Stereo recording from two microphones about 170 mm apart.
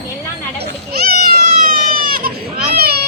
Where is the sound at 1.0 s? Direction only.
60° right (ahead or behind).